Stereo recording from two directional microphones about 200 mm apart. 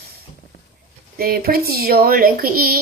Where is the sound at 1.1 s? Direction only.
50° right (ahead or behind).